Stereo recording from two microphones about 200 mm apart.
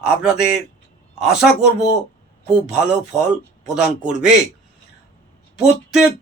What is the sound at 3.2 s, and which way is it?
Speech, 35° right (ahead or behind).